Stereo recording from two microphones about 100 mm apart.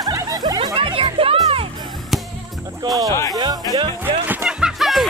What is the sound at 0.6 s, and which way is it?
Music, 60° right (ahead or behind).